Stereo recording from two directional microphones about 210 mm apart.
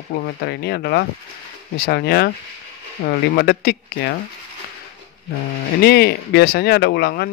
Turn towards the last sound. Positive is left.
turn(degrees=50)  # may be behind; listen again after turning